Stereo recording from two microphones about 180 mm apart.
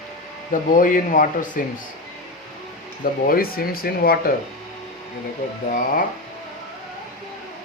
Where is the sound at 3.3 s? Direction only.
55° left (ahead or behind).